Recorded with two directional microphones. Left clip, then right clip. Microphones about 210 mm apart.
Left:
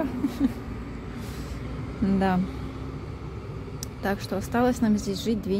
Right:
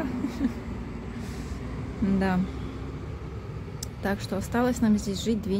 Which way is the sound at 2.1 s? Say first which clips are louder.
Left 3 dB; 15° left (ahead or behind).